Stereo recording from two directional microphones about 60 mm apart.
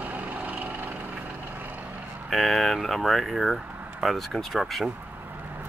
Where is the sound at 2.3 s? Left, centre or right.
Centre.